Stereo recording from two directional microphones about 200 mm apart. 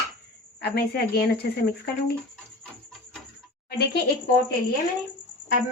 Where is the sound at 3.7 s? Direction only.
55° left (ahead or behind).